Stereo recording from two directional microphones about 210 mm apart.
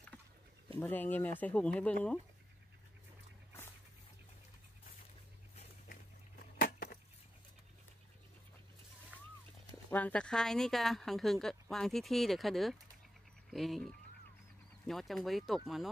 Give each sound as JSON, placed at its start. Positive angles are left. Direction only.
{"t": 0.7, "sound": "speech", "side_deg": 10}
{"t": 6.6, "sound": "a sound", "side_deg": 45}
{"t": 9.8, "sound": "speech", "side_deg": 5}
{"t": 14.9, "sound": "speech", "side_deg": 0}